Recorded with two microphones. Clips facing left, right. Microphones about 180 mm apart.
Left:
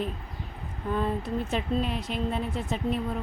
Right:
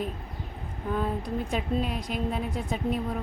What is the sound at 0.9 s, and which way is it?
A woman's voice, 10° right (ahead or behind).